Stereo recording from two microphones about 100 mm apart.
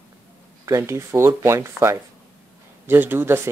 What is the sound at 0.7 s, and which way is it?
Speech, 30° right (ahead or behind).